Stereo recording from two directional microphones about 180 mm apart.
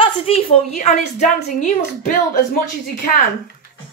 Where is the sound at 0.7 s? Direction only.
40° left (ahead or behind).